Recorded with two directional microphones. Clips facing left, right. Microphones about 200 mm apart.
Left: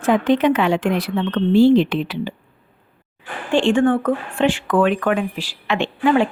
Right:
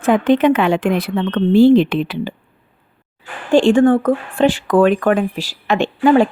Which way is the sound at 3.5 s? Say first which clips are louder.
Right 5 dB; 40° right (ahead or behind).